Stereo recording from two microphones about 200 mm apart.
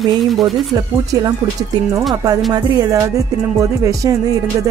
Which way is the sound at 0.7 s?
15° right (ahead or behind).